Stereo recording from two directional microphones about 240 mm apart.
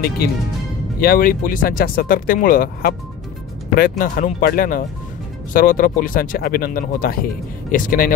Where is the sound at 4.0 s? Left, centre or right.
Left.